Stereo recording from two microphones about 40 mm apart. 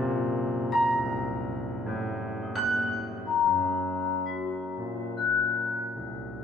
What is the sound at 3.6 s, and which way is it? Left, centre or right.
Music, centre.